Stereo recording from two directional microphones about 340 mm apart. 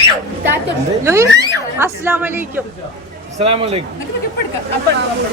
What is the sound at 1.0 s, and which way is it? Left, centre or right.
A woman's voice, centre.